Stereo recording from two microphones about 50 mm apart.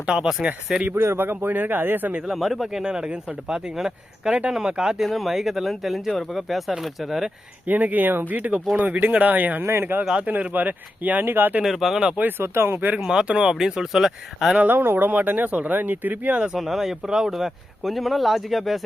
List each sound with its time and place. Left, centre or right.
0.0 s speech: centre
0.8 s speech: right
2.3 s speech: centre
2.8 s speech: centre
5.0 s speech: centre
7.7 s speech: right
9.6 s speech: right
10.2 s speech: right
11.6 s speech: centre
12.4 s speech: right
13.0 s speech: centre
14.7 s speech: right
16.6 s speech: centre